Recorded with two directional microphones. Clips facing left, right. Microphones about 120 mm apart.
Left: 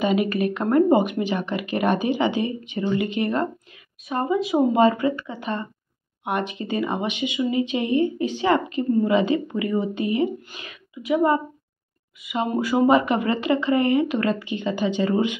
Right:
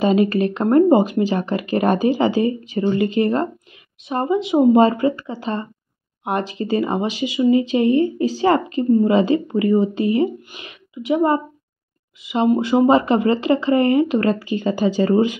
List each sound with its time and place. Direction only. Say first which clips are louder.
0.0 s speech: right 5 dB; 35° right (ahead or behind)